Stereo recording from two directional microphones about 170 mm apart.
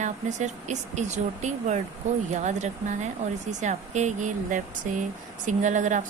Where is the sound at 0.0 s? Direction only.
45° right (ahead or behind).